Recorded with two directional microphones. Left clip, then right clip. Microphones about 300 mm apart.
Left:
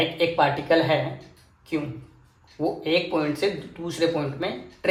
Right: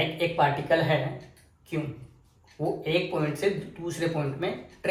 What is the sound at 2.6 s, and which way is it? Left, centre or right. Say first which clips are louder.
Speech: left 3 dB; left.